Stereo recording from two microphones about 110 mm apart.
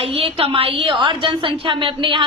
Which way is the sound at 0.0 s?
55° right (ahead or behind).